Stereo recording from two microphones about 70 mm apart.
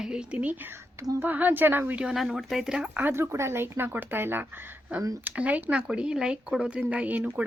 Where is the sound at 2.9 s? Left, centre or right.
Right.